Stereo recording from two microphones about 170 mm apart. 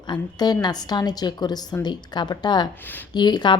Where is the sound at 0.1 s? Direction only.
25° left (ahead or behind).